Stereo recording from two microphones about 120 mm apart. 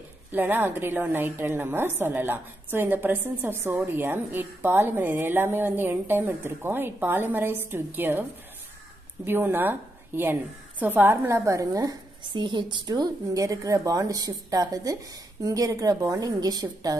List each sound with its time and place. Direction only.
0.3 s a woman's voice: 15° right (ahead or behind); by 16.9 s 35° right (ahead or behind)